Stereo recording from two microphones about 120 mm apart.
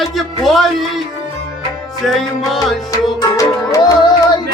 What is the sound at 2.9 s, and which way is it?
Music, 25° left (ahead or behind).